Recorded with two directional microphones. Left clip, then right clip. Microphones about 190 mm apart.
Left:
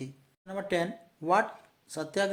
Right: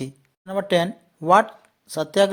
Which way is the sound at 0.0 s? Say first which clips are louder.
Right 10 dB; 40° right (ahead or behind).